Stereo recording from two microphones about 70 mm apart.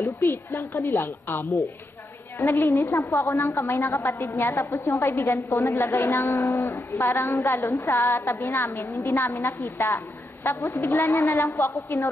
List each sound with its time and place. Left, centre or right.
0.0 s a woman's voice: left
1.0 s a woman's voice: left
2.3 s a woman's voice: left
4.4 s a woman's voice: left
6.7 s a woman's voice: left